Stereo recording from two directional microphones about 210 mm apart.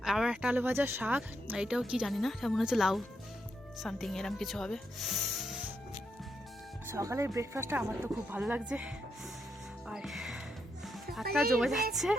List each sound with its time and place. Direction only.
0.0 s speech: centre (ahead or behind)
6.8 s speech: 15° right (ahead or behind)
9.9 s music: centre (ahead or behind)
11.3 s speech: centre (ahead or behind)